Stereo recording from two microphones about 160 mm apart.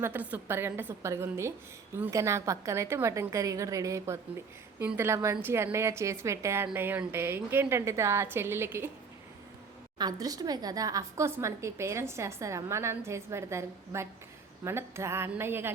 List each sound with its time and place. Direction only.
0.0 s a woman's voice: 10° right (ahead or behind)
10.0 s a woman's voice: 25° right (ahead or behind)